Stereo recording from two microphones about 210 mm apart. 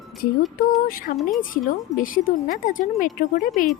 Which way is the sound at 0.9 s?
45° left (ahead or behind).